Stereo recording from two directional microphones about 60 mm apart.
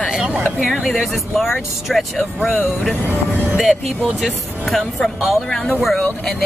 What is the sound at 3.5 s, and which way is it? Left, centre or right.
Speech, centre.